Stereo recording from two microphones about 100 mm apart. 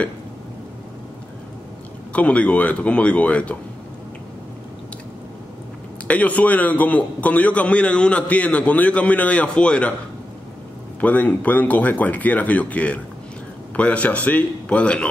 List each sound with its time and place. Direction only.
2.1 s a man's voice: 15° left (ahead or behind)
6.0 s a man's voice: 15° left (ahead or behind)
11.0 s a man's voice: 15° left (ahead or behind)